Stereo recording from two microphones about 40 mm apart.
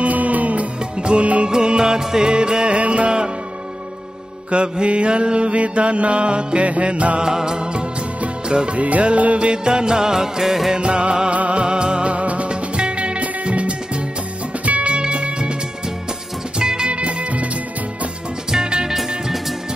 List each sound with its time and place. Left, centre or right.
0.0 s music: right
2.8 s music: right
4.5 s mantra: right
7.2 s mantra: centre
10.8 s music: right
16.5 s music: right
18.5 s music: centre